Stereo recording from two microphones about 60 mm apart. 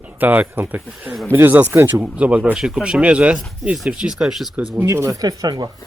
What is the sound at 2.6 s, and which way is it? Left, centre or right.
Speech, centre.